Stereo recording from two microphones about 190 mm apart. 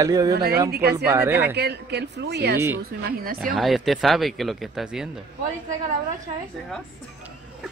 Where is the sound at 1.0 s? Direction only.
15° right (ahead or behind).